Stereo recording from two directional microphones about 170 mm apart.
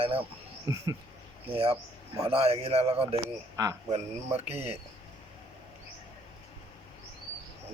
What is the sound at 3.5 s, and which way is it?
Speech, 20° right (ahead or behind).